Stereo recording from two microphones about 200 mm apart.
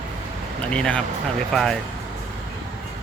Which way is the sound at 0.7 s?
5° left (ahead or behind).